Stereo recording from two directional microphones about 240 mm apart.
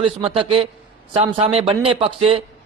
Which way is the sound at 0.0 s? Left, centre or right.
Right.